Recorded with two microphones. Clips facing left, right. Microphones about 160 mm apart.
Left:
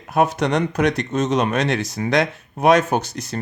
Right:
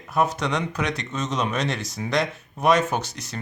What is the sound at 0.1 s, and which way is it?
Speech, 65° left (ahead or behind).